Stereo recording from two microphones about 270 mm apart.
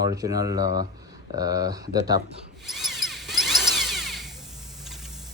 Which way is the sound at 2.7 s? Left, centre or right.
Centre.